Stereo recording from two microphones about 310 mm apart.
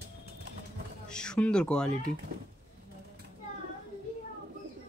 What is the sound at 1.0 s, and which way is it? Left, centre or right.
Speech, centre.